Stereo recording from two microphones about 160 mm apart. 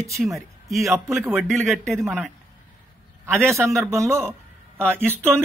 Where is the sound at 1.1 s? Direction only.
15° right (ahead or behind).